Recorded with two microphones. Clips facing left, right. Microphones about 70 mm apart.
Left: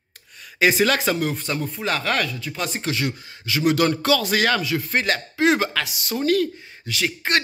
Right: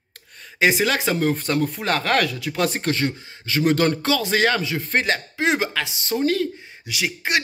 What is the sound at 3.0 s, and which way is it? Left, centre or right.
Speech, right.